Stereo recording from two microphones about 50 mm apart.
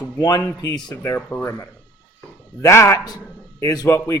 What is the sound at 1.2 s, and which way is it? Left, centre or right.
Speech, left.